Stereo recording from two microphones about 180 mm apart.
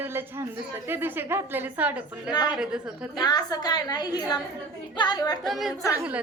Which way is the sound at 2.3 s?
25° left (ahead or behind).